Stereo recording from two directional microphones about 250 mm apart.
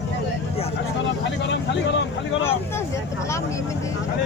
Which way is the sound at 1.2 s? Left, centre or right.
Left.